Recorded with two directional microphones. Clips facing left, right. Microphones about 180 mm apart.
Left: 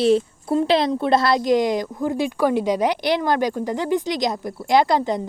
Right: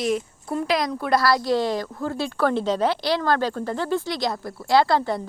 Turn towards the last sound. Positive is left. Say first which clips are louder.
# left 2 dB
turn(degrees=20)  # may be behind; listen again after turning